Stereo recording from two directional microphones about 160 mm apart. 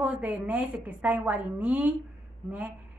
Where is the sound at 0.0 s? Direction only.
10° right (ahead or behind).